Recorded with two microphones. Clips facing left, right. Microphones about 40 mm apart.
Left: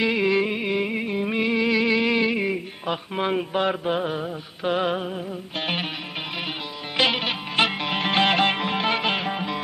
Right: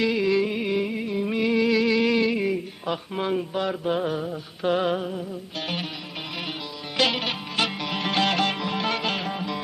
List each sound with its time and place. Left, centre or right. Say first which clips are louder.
0.0 s music: left 1 dB; left
3.8 s mantra: even; left
4.3 s a sound: right 1 dB; centre
5.5 s music: left 4 dB; left
6.9 s music: left 2 dB; left
7.5 s music: left 5 dB; left